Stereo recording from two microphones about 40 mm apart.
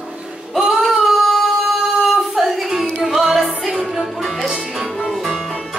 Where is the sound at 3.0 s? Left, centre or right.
Centre.